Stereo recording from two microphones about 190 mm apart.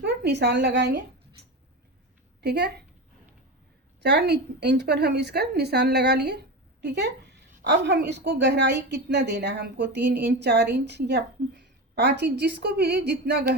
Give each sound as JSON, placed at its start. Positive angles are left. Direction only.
{"t": 0.0, "sound": "a woman's voice", "side_deg": -60}
{"t": 2.4, "sound": "a woman's voice", "side_deg": -60}
{"t": 4.0, "sound": "a woman's voice", "side_deg": -60}